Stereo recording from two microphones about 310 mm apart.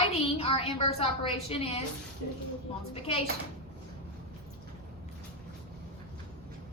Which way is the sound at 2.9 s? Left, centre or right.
Centre.